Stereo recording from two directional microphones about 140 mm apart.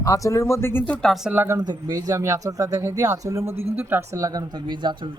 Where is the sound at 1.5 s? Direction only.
30° right (ahead or behind).